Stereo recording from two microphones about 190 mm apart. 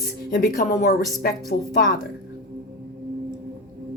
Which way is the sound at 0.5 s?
45° left (ahead or behind).